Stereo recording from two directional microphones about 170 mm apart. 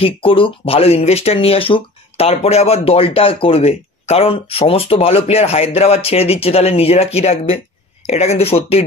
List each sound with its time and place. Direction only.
0.0 s speech: 30° left (ahead or behind)